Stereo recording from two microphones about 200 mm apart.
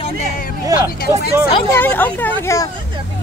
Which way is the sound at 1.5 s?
15° left (ahead or behind).